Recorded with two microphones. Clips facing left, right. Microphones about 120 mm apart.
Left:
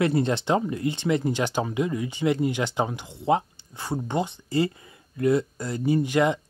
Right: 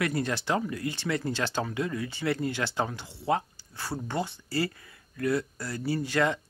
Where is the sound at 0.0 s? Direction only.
25° left (ahead or behind).